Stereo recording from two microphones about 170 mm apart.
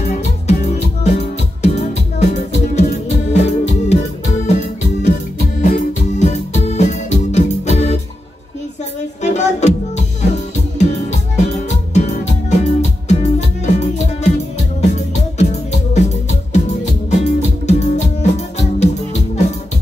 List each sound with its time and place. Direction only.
0.0 s music: 40° left (ahead or behind)
9.2 s music: 45° left (ahead or behind)